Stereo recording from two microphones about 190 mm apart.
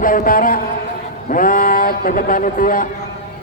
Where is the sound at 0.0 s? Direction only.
45° left (ahead or behind).